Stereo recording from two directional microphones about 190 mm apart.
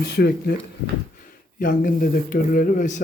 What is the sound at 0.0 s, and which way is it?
Speech, 60° left (ahead or behind).